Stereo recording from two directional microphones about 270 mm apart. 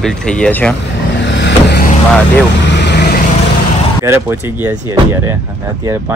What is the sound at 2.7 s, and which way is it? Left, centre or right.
Vehicle, left.